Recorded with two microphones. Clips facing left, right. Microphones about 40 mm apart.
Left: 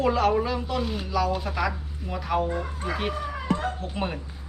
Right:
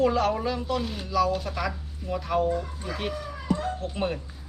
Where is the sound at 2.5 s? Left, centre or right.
Left.